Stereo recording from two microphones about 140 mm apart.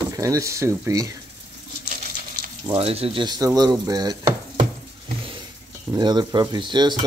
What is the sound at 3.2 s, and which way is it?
Chopping, 30° right (ahead or behind).